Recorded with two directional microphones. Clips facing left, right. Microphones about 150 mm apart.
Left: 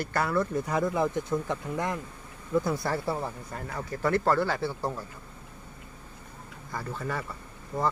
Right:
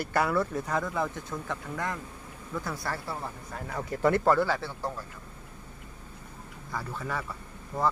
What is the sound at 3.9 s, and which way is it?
Speech, 20° right (ahead or behind).